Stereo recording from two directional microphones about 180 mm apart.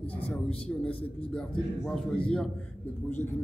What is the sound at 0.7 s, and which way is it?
A man's voice, 5° left (ahead or behind).